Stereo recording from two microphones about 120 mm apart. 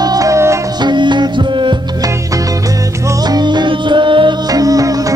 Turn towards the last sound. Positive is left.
turn(degrees=-30)  # may be behind; listen again after turning